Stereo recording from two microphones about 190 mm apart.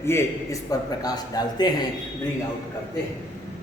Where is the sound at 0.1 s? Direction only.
15° left (ahead or behind).